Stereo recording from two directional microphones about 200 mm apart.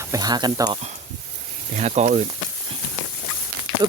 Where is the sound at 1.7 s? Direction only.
35° right (ahead or behind).